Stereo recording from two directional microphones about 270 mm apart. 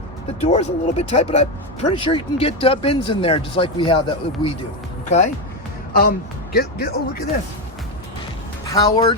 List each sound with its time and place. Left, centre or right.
0.3 s speech: left
8.6 s speech: centre